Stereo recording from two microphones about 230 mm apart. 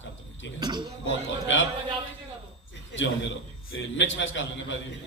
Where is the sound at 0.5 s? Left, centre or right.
Centre.